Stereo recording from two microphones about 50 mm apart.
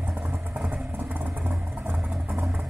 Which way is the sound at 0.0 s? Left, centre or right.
Right.